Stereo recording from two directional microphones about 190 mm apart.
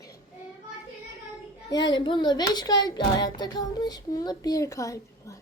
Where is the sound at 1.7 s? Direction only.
25° left (ahead or behind).